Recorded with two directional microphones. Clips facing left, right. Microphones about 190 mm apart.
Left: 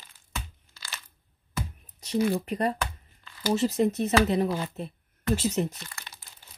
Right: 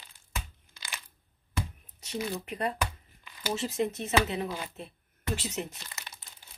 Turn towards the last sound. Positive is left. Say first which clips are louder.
# left 1 dB
turn(degrees=-20)  # may be behind; listen again after turning